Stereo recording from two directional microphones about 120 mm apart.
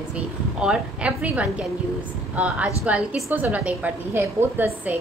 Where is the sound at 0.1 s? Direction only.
5° right (ahead or behind).